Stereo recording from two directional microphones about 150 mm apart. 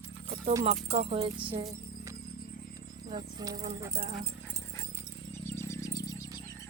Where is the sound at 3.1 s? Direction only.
25° right (ahead or behind).